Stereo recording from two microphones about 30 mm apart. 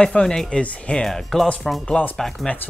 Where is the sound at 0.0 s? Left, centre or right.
Left.